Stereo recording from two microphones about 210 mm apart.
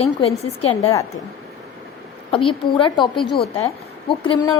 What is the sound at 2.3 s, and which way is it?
A woman's voice, 25° left (ahead or behind).